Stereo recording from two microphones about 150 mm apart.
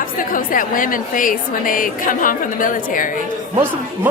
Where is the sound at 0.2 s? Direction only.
65° left (ahead or behind).